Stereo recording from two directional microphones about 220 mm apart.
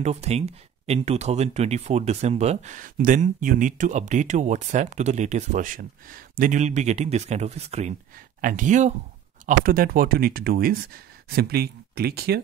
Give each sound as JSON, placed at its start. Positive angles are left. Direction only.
{"t": 0.0, "sound": "speech", "side_deg": -30}